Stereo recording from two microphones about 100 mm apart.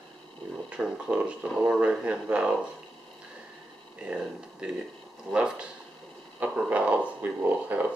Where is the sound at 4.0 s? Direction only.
10° right (ahead or behind).